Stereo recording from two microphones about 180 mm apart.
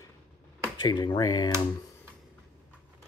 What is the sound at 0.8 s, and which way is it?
Speech, 25° left (ahead or behind).